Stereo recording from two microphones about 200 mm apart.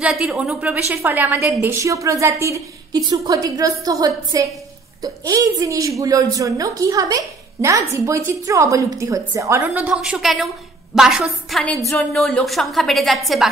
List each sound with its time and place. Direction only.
0.0 s a woman's voice: 5° right (ahead or behind)